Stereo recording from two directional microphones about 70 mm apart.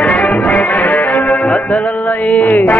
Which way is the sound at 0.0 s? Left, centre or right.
Left.